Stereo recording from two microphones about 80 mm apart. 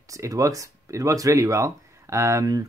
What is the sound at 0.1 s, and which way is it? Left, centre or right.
Speech, right.